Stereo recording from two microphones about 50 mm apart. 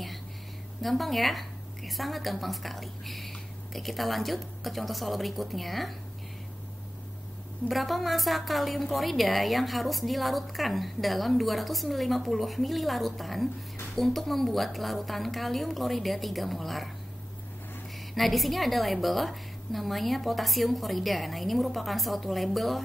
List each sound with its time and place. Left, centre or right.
0.8 s a woman's voice: centre
7.6 s a woman's voice: centre
18.1 s a woman's voice: centre